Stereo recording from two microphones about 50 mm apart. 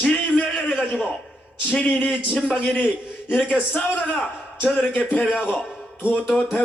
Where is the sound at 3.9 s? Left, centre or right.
Left.